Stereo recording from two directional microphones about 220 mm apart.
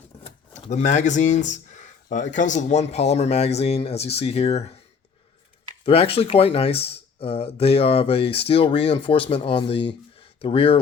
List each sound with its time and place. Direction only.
0.2 s speech: 35° left (ahead or behind)
5.8 s speech: 25° left (ahead or behind)